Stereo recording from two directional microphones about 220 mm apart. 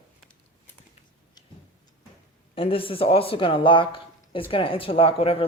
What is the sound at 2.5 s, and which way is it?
Speech, 25° left (ahead or behind).